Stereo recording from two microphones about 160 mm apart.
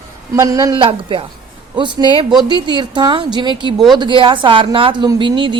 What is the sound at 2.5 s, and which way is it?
A woman's voice, 30° right (ahead or behind).